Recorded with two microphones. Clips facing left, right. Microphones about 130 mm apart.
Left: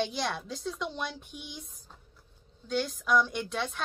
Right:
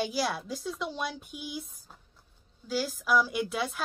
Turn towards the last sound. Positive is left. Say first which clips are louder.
# right 2 dB
turn(degrees=-5)  # may be behind; listen again after turning